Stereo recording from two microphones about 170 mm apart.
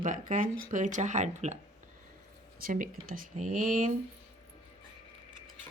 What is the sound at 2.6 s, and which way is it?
Speech, 55° right (ahead or behind).